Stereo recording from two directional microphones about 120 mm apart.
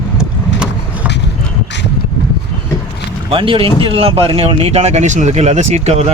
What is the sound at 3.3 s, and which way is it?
Speech, 45° right (ahead or behind).